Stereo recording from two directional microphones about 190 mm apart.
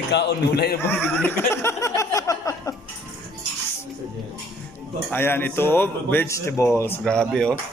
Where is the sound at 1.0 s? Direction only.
10° left (ahead or behind).